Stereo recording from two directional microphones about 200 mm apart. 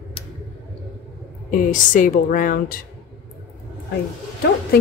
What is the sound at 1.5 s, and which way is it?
A woman's voice, 40° left (ahead or behind).